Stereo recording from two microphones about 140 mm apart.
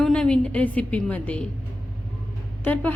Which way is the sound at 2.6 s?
10° left (ahead or behind).